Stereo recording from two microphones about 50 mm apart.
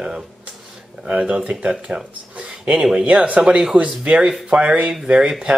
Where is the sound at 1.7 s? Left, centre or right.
Centre.